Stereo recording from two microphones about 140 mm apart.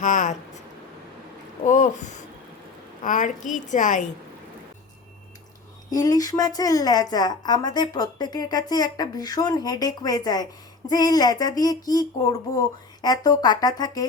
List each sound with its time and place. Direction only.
0.0 s speech: 60° left (ahead or behind)
1.6 s a woman's voice: 65° left (ahead or behind)
5.9 s a woman's voice: 25° left (ahead or behind)